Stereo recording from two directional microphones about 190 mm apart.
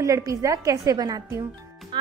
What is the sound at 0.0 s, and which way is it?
A woman's voice, 15° right (ahead or behind).